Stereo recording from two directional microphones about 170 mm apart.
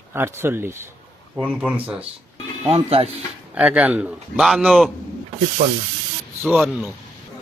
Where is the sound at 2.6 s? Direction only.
35° right (ahead or behind).